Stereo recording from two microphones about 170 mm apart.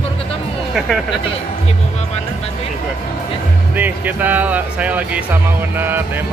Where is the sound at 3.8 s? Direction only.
10° right (ahead or behind).